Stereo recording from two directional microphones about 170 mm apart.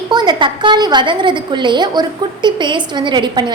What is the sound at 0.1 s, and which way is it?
A woman's voice, 25° right (ahead or behind).